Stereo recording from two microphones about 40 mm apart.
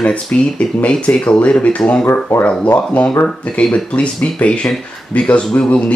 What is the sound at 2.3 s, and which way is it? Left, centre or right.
Speech, left.